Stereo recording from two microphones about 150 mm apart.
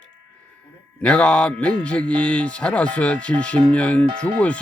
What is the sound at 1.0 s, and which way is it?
Speech, 5° left (ahead or behind).